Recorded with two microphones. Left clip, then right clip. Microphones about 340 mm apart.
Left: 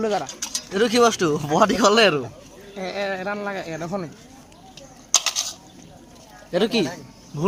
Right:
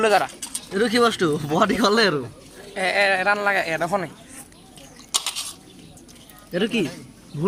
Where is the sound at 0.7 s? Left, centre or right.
Centre.